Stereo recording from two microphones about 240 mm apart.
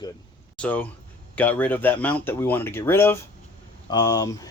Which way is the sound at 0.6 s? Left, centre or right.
Centre.